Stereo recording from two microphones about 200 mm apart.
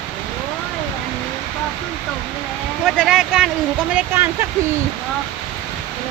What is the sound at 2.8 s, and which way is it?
Speech, 5° right (ahead or behind).